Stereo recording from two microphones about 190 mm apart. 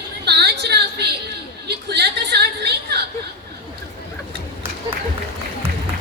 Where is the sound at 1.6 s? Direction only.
60° right (ahead or behind).